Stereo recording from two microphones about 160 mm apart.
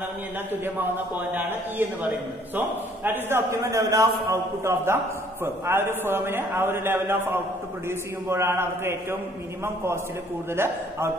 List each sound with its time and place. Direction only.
0.7 s a man's voice: 10° right (ahead or behind)
10.5 s a man's voice: 15° right (ahead or behind)